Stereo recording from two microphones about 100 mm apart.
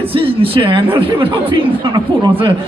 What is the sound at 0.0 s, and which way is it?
A man's voice, 65° right (ahead or behind).